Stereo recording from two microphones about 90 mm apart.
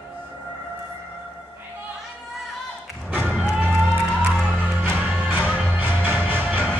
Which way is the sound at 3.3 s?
10° right (ahead or behind).